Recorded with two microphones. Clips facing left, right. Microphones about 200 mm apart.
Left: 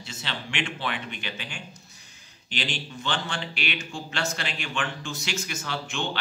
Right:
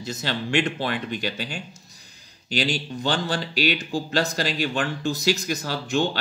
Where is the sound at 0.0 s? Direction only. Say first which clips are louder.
Right 8 dB; 40° right (ahead or behind).